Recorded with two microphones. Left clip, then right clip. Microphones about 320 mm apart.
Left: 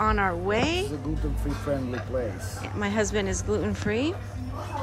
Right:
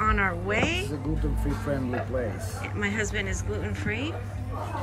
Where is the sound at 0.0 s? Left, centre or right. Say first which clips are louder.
Left 1 dB; centre.